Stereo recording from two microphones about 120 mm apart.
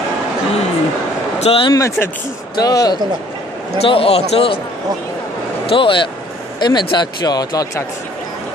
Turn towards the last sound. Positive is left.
turn(degrees=30)  # may be behind; listen again after turning